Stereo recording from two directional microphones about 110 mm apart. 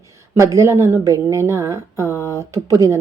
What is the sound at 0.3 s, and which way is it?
A woman's voice, 25° right (ahead or behind).